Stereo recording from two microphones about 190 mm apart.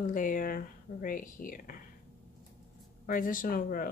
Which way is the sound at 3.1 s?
45° left (ahead or behind).